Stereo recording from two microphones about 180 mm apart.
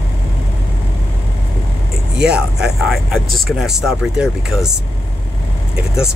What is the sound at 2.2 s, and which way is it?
Speech, 5° right (ahead or behind).